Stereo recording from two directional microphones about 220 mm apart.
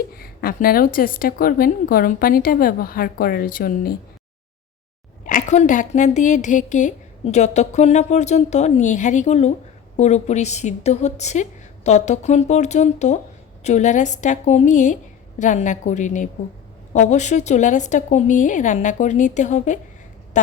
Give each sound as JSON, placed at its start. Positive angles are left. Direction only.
{"t": 0.1, "sound": "a woman's voice", "side_deg": 45}
{"t": 5.2, "sound": "a woman's voice", "side_deg": 35}